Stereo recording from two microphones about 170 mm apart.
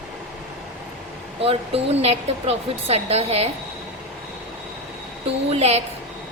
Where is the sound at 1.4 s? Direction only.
35° right (ahead or behind).